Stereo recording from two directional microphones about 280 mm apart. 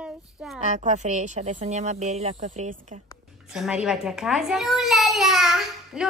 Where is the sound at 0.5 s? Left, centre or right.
Right.